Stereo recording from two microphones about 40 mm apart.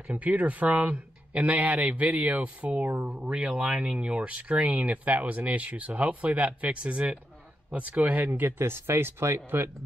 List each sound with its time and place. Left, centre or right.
0.0 s speech: right
4.9 s speech: right
8.3 s speech: right